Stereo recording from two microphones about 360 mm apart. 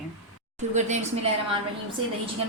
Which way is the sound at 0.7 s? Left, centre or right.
Centre.